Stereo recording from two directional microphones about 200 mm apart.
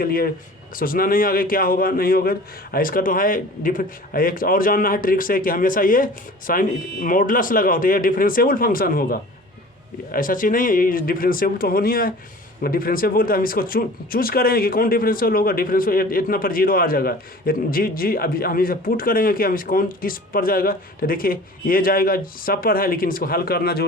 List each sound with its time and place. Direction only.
0.0 s speech: 45° left (ahead or behind)